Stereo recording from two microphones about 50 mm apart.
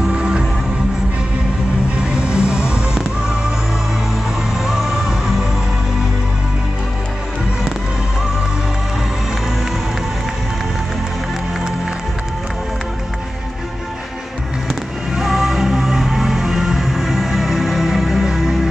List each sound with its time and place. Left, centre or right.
0.1 s music: centre
2.1 s music: centre
4.6 s music: centre
15.1 s music: centre